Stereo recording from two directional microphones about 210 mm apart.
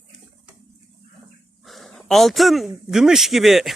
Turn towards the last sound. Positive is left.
turn(degrees=0)  # may be behind; listen again after turning